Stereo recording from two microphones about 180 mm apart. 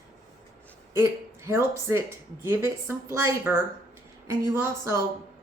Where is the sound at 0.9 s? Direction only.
15° right (ahead or behind).